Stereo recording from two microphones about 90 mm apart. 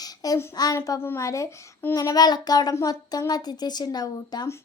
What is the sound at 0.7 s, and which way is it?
Speech, 40° left (ahead or behind).